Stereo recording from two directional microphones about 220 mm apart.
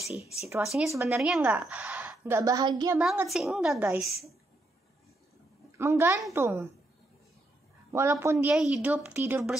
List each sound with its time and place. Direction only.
0.1 s speech: 30° left (ahead or behind)
0.7 s a woman's voice: centre (ahead or behind); by 3.0 s 20° right (ahead or behind)
3.0 s a woman's voice: centre (ahead or behind)
5.8 s a woman's voice: 10° right (ahead or behind)
7.9 s a woman's voice: 10° right (ahead or behind)